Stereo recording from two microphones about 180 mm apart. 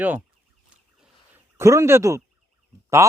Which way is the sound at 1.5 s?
15° right (ahead or behind).